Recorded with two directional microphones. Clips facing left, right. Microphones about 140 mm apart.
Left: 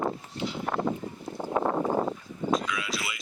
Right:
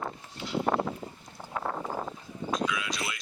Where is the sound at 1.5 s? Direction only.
40° left (ahead or behind).